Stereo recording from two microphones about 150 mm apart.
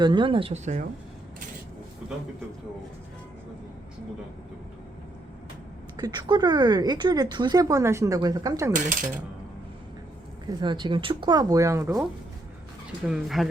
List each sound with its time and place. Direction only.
0.0 s speech: 30° right (ahead or behind); by 0.9 s 50° right (ahead or behind)
6.0 s speech: 30° right (ahead or behind)
8.7 s speech: 60° right (ahead or behind)
10.4 s speech: 30° right (ahead or behind)
13.1 s speech: centre (ahead or behind)